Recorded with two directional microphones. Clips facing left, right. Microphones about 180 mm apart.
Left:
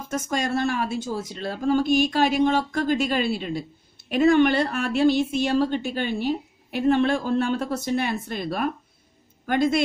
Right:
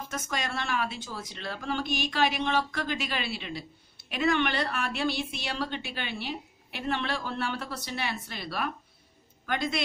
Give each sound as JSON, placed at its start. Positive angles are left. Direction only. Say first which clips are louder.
{"t": 0.1, "sound": "a woman's voice", "louder": "left 10 dB", "side_deg": 45}